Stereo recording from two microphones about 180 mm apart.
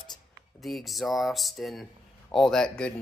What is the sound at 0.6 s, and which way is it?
Speech, centre (ahead or behind).